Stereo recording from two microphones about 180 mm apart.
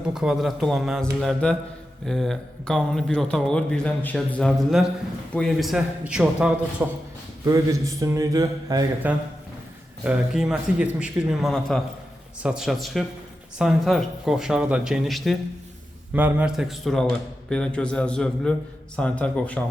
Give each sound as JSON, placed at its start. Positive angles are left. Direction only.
{"t": 0.0, "sound": "a man's voice", "side_deg": -5}
{"t": 10.0, "sound": "speech", "side_deg": -5}